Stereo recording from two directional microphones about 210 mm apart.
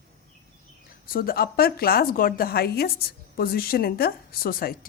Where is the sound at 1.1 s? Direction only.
45° left (ahead or behind).